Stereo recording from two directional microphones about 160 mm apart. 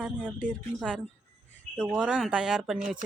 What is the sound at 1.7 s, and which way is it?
Speech, 5° right (ahead or behind).